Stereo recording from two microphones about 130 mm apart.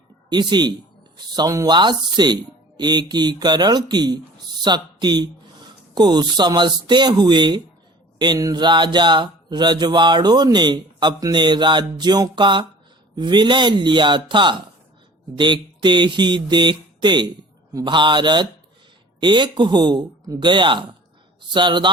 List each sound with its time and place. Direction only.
0.3 s mantra: 35° right (ahead or behind)
4.6 s speech: 35° right (ahead or behind)
8.2 s mantra: 30° right (ahead or behind)